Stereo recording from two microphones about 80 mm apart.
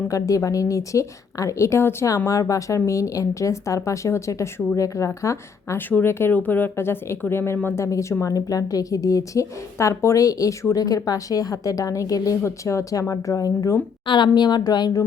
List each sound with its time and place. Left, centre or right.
0.1 s a woman's voice: left
2.0 s speech: left
5.7 s speech: left
7.8 s a woman's voice: left
14.1 s speech: left